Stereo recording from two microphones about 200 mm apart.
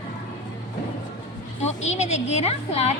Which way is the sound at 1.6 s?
35° left (ahead or behind).